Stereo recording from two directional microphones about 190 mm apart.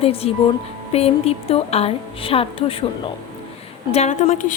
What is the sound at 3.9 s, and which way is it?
Speech, 35° left (ahead or behind).